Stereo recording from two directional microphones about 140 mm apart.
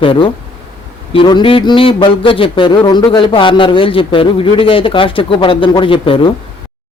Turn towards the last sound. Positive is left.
turn(degrees=40)  # may be behind; listen again after turning